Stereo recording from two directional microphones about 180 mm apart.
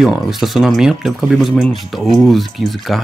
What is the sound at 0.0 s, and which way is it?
Speech, centre (ahead or behind).